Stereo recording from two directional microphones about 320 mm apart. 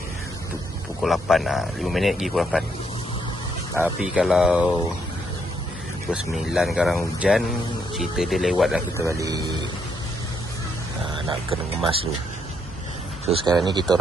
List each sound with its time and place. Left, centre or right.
1.0 s speech: centre
3.7 s speech: centre
6.3 s speech: centre
11.2 s speech: centre
13.3 s speech: centre